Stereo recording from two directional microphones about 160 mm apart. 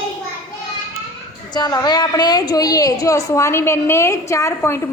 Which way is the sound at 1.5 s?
25° left (ahead or behind).